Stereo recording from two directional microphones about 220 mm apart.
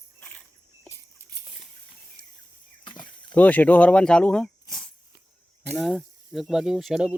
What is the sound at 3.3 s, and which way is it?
Speech, 5° left (ahead or behind).